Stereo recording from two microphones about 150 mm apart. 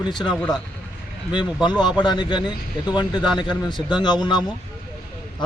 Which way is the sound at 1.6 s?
30° left (ahead or behind).